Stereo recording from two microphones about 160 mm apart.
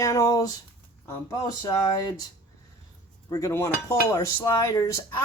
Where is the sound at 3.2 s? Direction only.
20° left (ahead or behind).